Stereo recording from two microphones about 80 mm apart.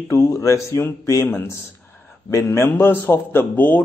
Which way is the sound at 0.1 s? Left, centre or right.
Left.